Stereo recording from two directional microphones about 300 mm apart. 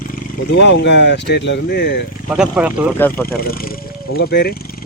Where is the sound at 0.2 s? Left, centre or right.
Left.